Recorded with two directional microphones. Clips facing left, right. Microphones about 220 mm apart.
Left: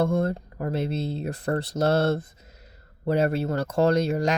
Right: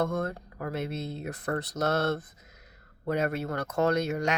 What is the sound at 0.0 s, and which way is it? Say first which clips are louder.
Speech: left 6 dB; 30° left (ahead or behind).